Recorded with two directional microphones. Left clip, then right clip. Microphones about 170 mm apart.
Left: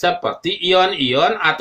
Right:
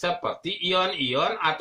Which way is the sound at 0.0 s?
20° left (ahead or behind).